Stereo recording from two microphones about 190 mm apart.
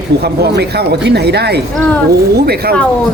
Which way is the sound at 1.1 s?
60° right (ahead or behind).